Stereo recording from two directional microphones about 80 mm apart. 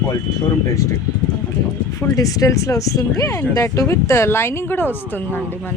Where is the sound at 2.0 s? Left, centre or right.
Left.